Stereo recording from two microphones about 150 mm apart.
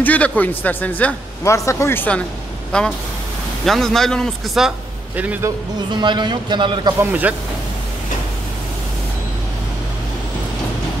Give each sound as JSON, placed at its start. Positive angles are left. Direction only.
{"t": 0.0, "sound": "a man's voice", "side_deg": 10}
{"t": 5.9, "sound": "a man's voice", "side_deg": -30}
{"t": 7.0, "sound": "speech", "side_deg": -10}